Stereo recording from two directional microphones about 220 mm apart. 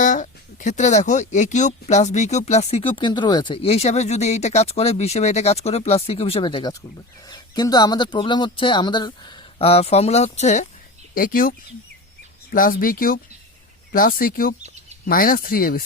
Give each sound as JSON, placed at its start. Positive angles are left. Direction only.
{"t": 0.0, "sound": "speech", "side_deg": 35}